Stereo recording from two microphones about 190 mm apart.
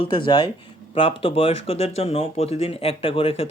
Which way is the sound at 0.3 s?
25° left (ahead or behind).